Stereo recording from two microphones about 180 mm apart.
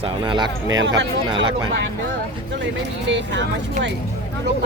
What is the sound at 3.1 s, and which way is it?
Speech, 80° right.